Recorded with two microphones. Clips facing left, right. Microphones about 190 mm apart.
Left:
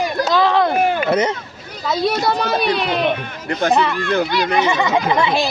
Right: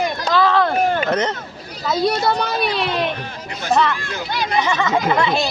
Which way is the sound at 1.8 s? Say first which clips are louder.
Even; centre (ahead or behind).